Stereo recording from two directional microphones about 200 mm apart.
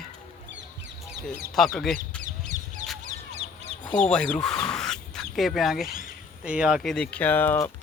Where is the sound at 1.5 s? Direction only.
Centre (ahead or behind).